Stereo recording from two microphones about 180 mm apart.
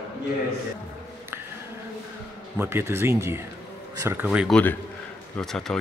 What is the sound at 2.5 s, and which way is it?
Speech, 15° right (ahead or behind).